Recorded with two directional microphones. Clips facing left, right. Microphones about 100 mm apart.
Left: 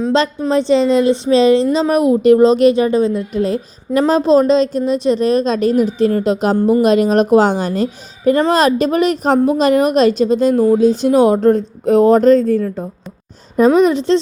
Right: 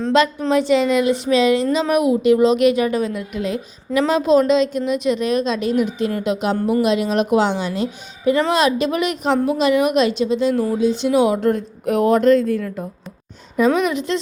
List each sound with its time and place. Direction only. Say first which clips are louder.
0.1 s a woman's voice: right 1 dB; 30° left (ahead or behind)